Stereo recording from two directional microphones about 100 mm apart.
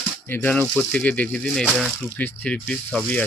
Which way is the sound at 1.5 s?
5° left (ahead or behind).